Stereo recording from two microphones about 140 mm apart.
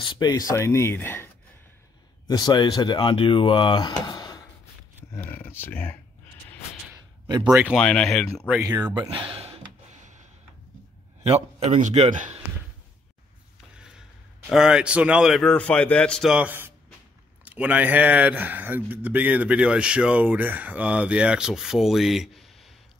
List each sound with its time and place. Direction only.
0.0 s speech: 35° left (ahead or behind); by 1.3 s 15° left (ahead or behind)
2.2 s speech: 30° left (ahead or behind)
5.2 s speech: 15° left (ahead or behind)
7.4 s speech: 5° right (ahead or behind)
7.7 s speech: 5° left (ahead or behind)
8.9 s speech: 35° right (ahead or behind)
11.2 s a man's voice: 45° right (ahead or behind)
13.7 s a sound: 5° right (ahead or behind)
14.5 s speech: 5° right (ahead or behind)
15.5 s speech: 10° left (ahead or behind)